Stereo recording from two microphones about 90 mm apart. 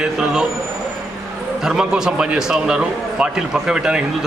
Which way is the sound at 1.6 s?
5° right (ahead or behind).